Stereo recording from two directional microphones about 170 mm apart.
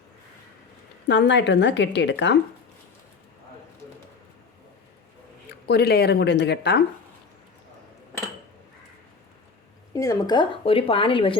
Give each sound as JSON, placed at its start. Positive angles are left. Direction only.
{"t": 1.0, "sound": "a woman's voice", "side_deg": 90}
{"t": 5.6, "sound": "speech", "side_deg": 70}
{"t": 9.9, "sound": "speech", "side_deg": 20}